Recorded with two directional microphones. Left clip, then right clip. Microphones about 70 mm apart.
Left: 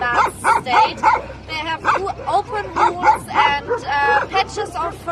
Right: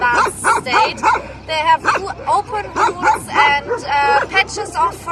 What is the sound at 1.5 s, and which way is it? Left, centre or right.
Bow-wow, left.